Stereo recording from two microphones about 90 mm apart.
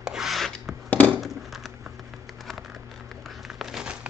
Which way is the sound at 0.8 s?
15° left (ahead or behind).